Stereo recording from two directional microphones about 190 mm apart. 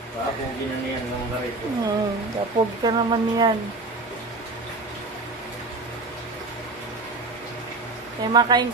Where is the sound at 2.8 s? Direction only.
25° right (ahead or behind).